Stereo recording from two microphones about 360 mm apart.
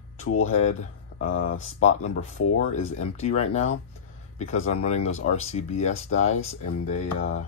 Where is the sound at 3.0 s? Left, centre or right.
Centre.